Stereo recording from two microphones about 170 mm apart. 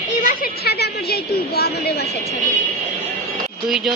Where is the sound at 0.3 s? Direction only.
60° left (ahead or behind).